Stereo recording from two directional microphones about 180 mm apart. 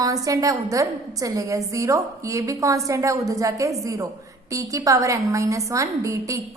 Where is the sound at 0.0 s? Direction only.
20° right (ahead or behind).